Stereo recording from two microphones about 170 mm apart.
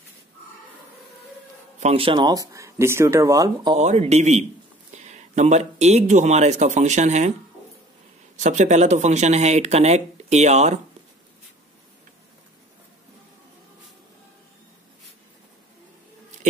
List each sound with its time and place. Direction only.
1.8 s speech: 35° right (ahead or behind); by 3.7 s 20° right (ahead or behind)
3.7 s speech: 40° right (ahead or behind)
8.4 s speech: 45° right (ahead or behind)